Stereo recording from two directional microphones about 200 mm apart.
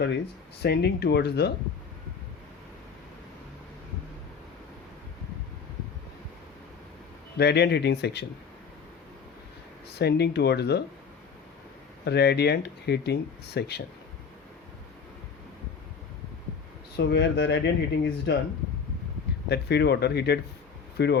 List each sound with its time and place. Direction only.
0.6 s speech: 55° left (ahead or behind)
7.3 s speech: 55° left (ahead or behind)
10.0 s speech: 55° left (ahead or behind)
12.0 s speech: 55° left (ahead or behind)
17.0 s speech: 55° left (ahead or behind)
19.5 s speech: 55° left (ahead or behind)